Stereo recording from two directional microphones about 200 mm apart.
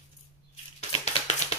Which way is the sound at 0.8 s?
35° left (ahead or behind).